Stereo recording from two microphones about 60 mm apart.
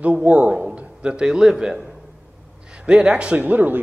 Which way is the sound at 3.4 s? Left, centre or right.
Right.